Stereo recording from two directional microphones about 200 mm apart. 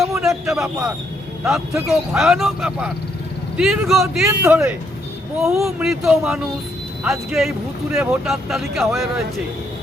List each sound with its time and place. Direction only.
0.2 s a man's voice: centre (ahead or behind)
4.3 s speech: 15° right (ahead or behind)
5.4 s speech: centre (ahead or behind)